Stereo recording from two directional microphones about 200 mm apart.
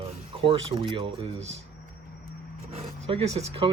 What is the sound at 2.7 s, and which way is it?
Zipper, 30° right (ahead or behind).